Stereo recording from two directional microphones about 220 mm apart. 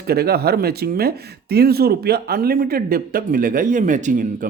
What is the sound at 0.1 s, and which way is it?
Speech, 45° right (ahead or behind).